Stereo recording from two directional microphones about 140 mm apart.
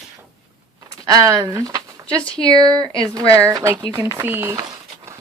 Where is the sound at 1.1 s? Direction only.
25° right (ahead or behind).